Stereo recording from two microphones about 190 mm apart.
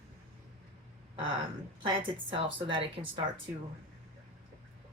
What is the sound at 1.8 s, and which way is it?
A woman's voice, 25° right (ahead or behind).